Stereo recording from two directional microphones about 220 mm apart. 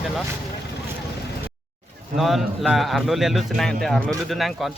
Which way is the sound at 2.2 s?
Centre (ahead or behind).